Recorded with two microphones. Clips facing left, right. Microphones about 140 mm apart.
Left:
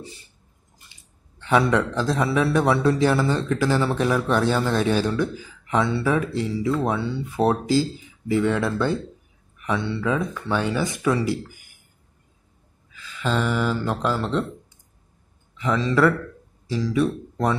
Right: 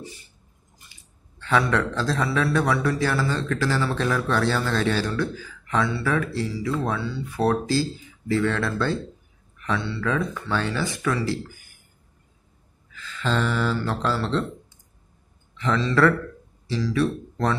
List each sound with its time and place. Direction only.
1.4 s a man's voice: 20° left (ahead or behind)
12.9 s speech: 10° left (ahead or behind)
15.5 s speech: 10° left (ahead or behind)